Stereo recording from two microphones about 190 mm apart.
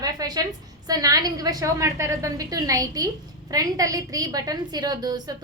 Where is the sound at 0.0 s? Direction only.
20° right (ahead or behind).